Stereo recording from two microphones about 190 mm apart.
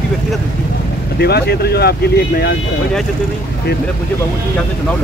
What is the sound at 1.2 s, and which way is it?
Speech, 60° left (ahead or behind).